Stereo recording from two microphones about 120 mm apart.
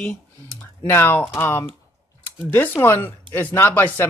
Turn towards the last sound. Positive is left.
turn(degrees=20)  # may be behind; listen again after turning